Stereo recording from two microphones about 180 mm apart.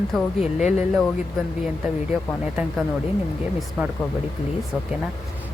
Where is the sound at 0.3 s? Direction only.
40° left (ahead or behind).